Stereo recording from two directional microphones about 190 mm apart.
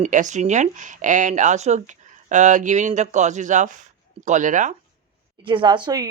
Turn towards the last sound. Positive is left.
turn(degrees=-25)  # may be behind; listen again after turning